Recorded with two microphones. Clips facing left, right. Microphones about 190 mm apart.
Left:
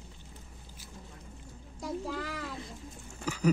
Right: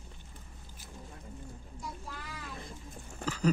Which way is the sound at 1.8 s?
90° left.